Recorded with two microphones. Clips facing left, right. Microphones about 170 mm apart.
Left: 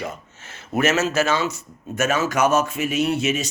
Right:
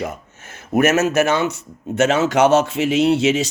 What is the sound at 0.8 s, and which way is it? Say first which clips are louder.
Speech: right 4 dB; 55° right (ahead or behind).